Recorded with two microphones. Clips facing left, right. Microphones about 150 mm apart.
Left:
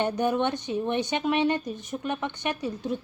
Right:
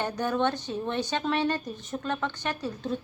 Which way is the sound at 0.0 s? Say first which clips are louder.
Left 2 dB; 20° left (ahead or behind).